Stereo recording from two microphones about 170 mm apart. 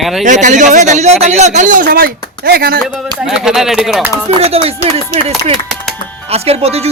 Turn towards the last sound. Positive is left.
turn(degrees=-35)  # may be behind; listen again after turning